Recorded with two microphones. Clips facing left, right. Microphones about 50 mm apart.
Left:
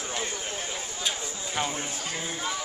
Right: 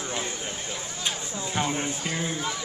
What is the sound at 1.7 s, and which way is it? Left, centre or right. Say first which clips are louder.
Speech: right 4 dB; right.